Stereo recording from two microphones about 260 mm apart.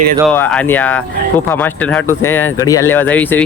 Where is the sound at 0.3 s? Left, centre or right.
Centre.